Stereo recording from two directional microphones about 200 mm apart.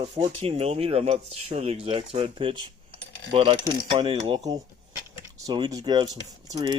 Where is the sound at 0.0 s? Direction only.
25° right (ahead or behind).